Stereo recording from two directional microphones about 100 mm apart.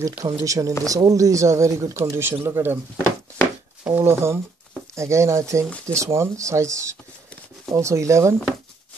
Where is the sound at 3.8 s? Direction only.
20° right (ahead or behind).